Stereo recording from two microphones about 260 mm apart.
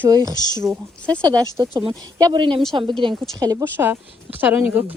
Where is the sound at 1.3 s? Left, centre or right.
Centre.